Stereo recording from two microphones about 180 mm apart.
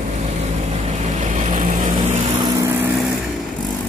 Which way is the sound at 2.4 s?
15° right (ahead or behind).